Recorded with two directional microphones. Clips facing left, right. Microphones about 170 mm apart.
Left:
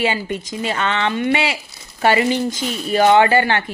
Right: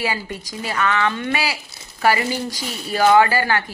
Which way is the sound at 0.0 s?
25° left (ahead or behind).